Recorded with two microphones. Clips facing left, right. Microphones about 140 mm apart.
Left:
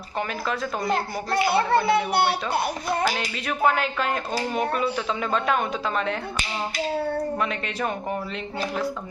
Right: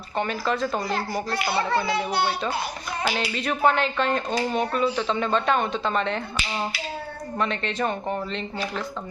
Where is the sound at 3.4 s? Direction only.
Centre (ahead or behind).